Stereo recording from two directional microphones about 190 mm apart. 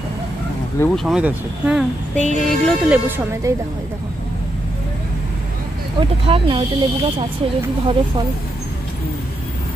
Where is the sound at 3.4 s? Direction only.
15° right (ahead or behind).